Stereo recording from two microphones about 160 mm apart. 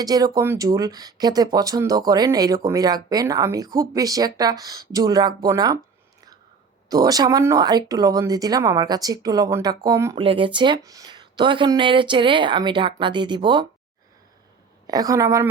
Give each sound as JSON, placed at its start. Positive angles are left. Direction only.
{"t": 0.0, "sound": "speech", "side_deg": -25}
{"t": 6.9, "sound": "speech", "side_deg": -25}
{"t": 10.2, "sound": "speech", "side_deg": -35}
{"t": 14.8, "sound": "speech", "side_deg": -25}